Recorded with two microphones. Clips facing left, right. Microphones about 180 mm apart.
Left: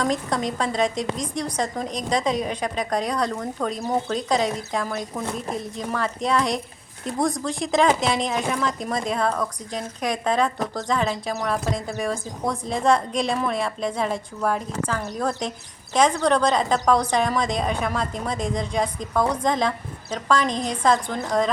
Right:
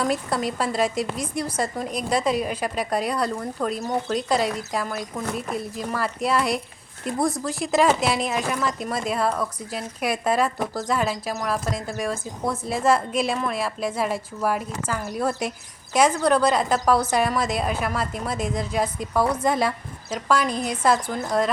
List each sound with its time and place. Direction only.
0.0 s speech: 5° right (ahead or behind)